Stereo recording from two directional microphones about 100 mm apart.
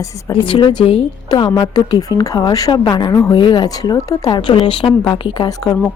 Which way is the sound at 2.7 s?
50° left (ahead or behind).